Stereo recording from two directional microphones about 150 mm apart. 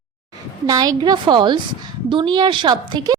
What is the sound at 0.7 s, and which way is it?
A woman's voice, 25° right (ahead or behind).